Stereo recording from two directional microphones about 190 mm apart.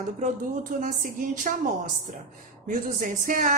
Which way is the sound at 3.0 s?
45° right (ahead or behind).